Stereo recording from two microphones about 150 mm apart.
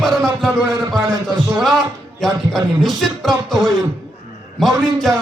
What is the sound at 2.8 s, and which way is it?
Speech, centre (ahead or behind).